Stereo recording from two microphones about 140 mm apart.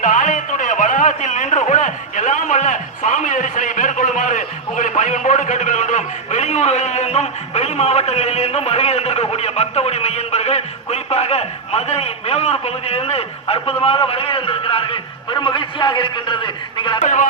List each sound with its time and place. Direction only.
0.0 s a man's voice: 70° left (ahead or behind); by 17.0 s 35° left (ahead or behind)
17.0 s speech: 65° left (ahead or behind)